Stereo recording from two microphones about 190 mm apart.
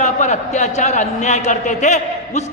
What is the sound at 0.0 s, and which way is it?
Speech, 40° left (ahead or behind).